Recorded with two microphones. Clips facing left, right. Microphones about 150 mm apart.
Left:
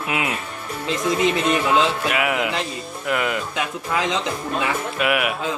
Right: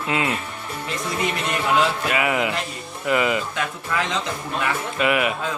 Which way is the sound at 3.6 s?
20° left (ahead or behind).